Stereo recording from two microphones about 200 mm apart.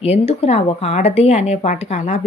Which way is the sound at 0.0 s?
30° left (ahead or behind).